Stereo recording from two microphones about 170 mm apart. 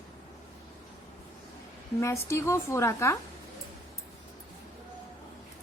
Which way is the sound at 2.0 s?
15° left (ahead or behind).